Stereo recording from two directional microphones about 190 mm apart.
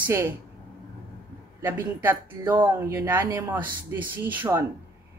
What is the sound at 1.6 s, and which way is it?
A woman's voice, 10° right (ahead or behind).